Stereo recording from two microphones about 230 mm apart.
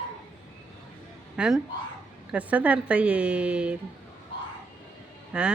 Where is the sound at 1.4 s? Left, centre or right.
Centre.